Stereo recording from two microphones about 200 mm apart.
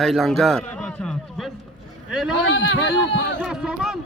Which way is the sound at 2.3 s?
65° left (ahead or behind).